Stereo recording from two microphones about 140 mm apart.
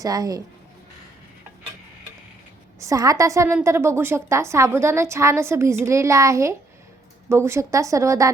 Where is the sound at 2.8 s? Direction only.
25° right (ahead or behind).